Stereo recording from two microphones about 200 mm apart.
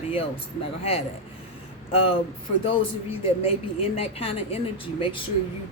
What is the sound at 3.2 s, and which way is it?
A woman's voice, 30° left (ahead or behind).